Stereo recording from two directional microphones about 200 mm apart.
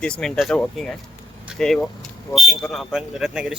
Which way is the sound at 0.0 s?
5° left (ahead or behind).